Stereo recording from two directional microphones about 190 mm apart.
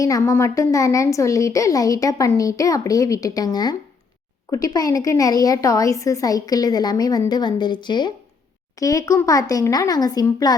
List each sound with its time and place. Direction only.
0.0 s a woman's voice: 15° left (ahead or behind)